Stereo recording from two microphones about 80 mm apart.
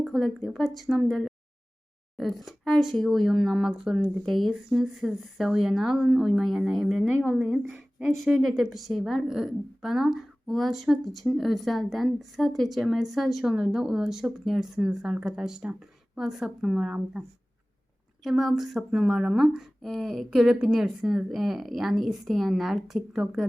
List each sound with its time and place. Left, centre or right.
0.0 s a woman's voice: centre